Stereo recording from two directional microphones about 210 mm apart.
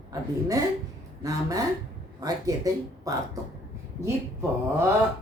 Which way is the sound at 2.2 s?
15° right (ahead or behind).